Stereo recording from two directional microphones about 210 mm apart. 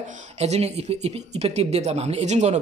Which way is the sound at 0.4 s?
30° right (ahead or behind).